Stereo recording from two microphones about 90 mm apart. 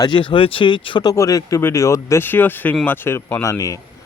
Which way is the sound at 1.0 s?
40° left (ahead or behind).